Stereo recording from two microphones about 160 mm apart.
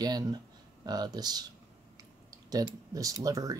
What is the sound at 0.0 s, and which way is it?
Speech, 25° right (ahead or behind).